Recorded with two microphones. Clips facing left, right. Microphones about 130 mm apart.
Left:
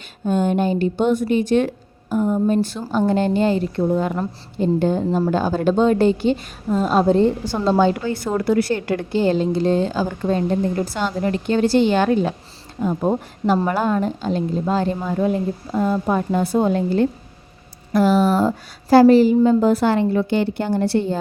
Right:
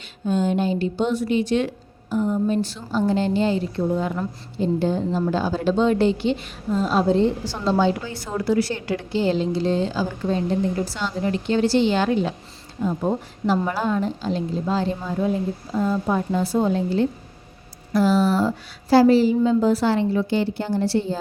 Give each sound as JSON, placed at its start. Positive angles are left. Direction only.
{"t": 0.3, "sound": "a woman's voice", "side_deg": 55}